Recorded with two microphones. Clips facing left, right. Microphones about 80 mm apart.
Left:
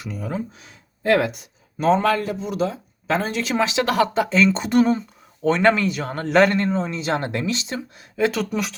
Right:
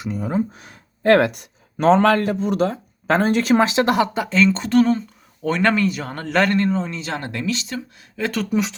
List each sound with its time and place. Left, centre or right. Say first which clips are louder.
0.0 s speech: right 6 dB; right
0.5 s speech: right 3 dB; right
4.3 s speech: right 1 dB; centre
5.4 s speech: left 1 dB; centre
6.9 s speech: left 4 dB; left
8.1 s speech: left 3 dB; centre